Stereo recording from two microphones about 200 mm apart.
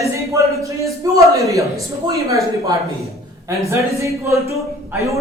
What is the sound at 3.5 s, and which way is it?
A man's voice, 15° right (ahead or behind).